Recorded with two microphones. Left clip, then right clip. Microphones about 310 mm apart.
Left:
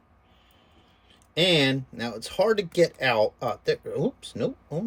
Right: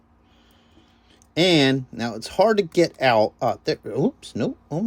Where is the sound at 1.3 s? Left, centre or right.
Centre.